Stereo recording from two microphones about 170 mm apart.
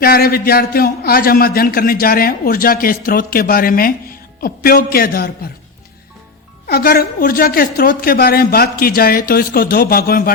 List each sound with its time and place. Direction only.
0.0 s a man's voice: 65° left (ahead or behind)
6.7 s a man's voice: 60° left (ahead or behind)